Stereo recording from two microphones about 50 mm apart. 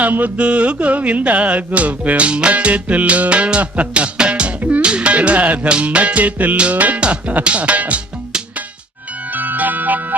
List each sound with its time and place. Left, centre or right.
0.0 s music: right
9.3 s music: right